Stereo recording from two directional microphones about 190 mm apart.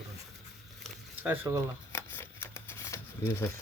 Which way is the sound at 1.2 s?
15° right (ahead or behind).